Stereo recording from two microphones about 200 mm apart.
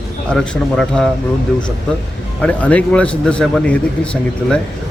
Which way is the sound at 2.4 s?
5° left (ahead or behind).